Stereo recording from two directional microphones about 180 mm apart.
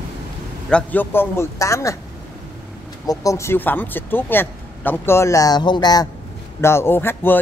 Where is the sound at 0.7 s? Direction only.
10° left (ahead or behind).